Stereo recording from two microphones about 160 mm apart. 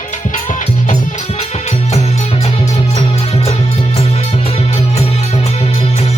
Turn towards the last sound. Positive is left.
turn(degrees=40)  # may be behind; listen again after turning